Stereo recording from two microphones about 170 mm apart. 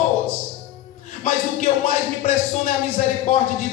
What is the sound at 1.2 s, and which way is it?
Speech, 40° left (ahead or behind).